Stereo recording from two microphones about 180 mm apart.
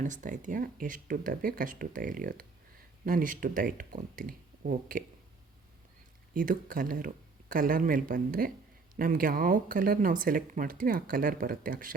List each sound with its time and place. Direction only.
0.0 s speech: 45° right (ahead or behind)
6.3 s speech: 50° right (ahead or behind)